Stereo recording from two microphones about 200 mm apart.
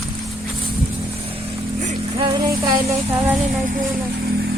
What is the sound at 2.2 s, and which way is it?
Music, 20° right (ahead or behind).